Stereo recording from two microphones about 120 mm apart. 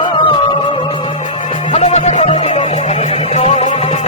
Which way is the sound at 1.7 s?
65° left (ahead or behind).